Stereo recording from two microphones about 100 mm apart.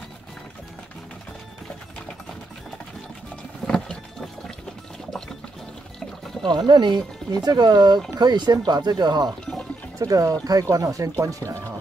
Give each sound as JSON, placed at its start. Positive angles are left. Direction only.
{"t": 3.6, "sound": "vehicle", "side_deg": 5}
{"t": 6.4, "sound": "speech", "side_deg": -45}
{"t": 9.9, "sound": "speech", "side_deg": -35}